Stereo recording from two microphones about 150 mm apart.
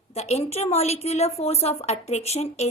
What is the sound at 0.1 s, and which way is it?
Speech, 45° left (ahead or behind).